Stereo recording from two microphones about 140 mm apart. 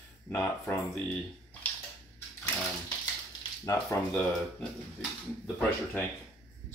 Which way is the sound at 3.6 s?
20° left (ahead or behind).